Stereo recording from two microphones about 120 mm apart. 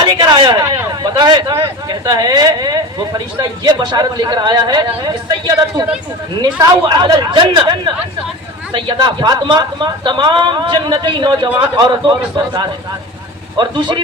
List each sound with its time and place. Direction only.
0.0 s speech: 40° right (ahead or behind)
13.6 s speech: 40° right (ahead or behind)